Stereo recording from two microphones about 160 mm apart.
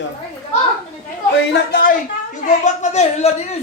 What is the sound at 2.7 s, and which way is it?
Speech, 45° left (ahead or behind).